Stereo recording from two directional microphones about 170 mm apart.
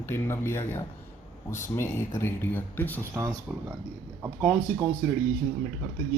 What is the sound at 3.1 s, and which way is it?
Speech, 15° right (ahead or behind).